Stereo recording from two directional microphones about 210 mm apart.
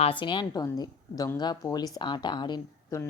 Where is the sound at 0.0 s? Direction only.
25° left (ahead or behind).